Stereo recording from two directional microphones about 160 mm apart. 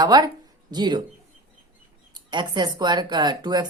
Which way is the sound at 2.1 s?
25° right (ahead or behind).